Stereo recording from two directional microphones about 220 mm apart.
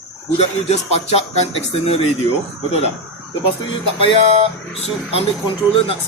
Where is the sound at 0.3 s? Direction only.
30° left (ahead or behind).